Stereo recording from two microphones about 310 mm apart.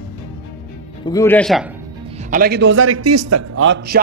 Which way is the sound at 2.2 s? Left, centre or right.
Right.